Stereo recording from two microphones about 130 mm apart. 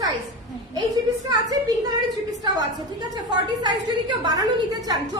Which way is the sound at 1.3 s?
30° right (ahead or behind).